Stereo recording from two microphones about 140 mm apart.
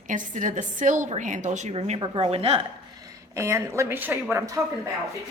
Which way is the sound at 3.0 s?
20° right (ahead or behind).